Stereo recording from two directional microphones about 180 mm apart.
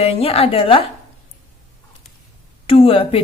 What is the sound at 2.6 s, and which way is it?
Speech, 30° left (ahead or behind).